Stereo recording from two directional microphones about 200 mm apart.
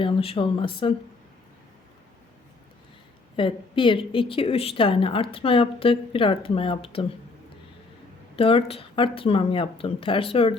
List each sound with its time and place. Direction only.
0.0 s a woman's voice: 25° left (ahead or behind)
3.3 s a woman's voice: 25° left (ahead or behind)
8.4 s a woman's voice: 30° left (ahead or behind)